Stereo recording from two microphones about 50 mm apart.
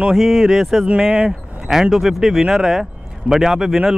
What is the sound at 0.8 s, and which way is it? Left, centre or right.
Speech, right.